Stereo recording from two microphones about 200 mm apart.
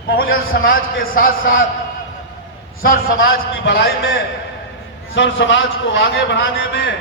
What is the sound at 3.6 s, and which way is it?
Speech, 60° left (ahead or behind).